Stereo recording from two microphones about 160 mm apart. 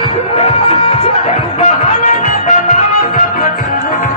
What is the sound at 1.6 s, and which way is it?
Music, 50° left (ahead or behind).